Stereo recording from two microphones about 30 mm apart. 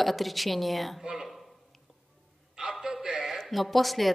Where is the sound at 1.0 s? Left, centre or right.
Centre.